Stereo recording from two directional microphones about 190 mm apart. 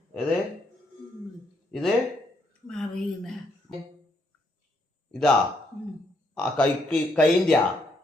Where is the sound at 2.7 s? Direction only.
5° left (ahead or behind).